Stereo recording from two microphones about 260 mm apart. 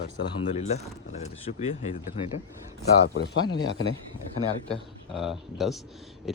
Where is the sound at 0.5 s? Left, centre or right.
Left.